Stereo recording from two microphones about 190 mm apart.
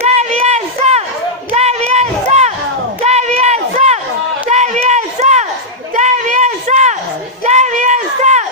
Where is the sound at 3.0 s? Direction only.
35° right (ahead or behind).